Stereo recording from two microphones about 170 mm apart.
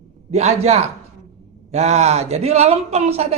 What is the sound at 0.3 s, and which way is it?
A man's voice, 40° right (ahead or behind).